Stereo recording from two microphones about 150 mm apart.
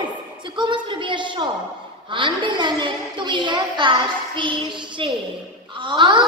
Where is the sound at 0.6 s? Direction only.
35° right (ahead or behind).